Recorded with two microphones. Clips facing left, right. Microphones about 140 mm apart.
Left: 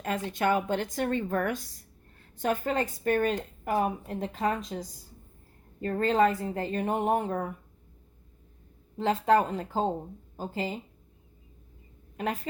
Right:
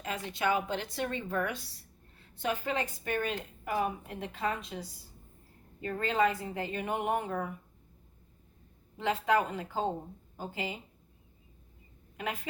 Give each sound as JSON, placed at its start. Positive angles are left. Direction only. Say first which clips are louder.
{"t": 0.3, "sound": "a woman's voice", "louder": "left 3 dB", "side_deg": 50}
{"t": 9.0, "sound": "a woman's voice", "louder": "left 5 dB", "side_deg": 40}
{"t": 12.1, "sound": "a woman's voice", "louder": "left 5 dB", "side_deg": 40}